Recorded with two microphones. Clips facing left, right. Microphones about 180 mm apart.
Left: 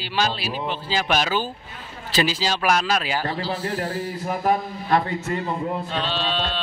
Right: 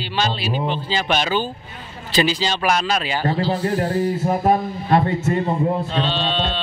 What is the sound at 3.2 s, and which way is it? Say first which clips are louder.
Speech: right 6 dB; 25° right (ahead or behind).